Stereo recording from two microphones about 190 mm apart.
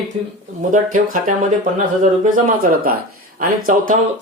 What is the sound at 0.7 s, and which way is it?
Speech, 45° right (ahead or behind).